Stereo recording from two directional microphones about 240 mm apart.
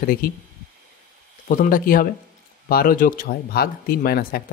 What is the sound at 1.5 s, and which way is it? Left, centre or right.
Speech, left.